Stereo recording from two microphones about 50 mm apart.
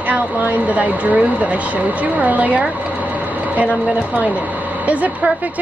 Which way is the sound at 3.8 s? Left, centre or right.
Right.